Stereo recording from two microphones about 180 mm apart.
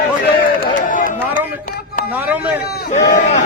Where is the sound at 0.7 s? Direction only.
50° left (ahead or behind).